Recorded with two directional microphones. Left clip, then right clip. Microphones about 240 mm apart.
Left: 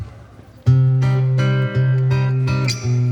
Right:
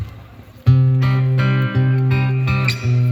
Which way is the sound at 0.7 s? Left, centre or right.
Left.